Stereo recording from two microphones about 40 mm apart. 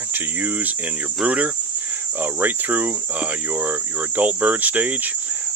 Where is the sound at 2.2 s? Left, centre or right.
Right.